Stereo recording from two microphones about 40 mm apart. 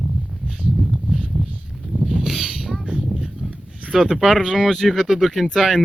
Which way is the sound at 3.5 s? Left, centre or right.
Right.